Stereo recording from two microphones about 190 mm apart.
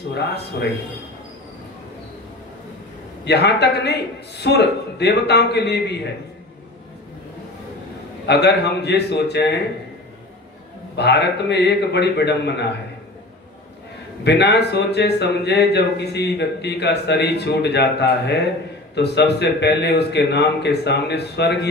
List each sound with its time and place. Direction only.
3.3 s speech: 60° left (ahead or behind)
8.3 s speech: 60° left (ahead or behind)
11.0 s speech: 60° left (ahead or behind)
14.2 s speech: 60° left (ahead or behind)